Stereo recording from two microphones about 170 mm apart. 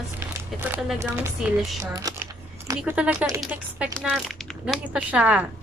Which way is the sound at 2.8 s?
10° right (ahead or behind).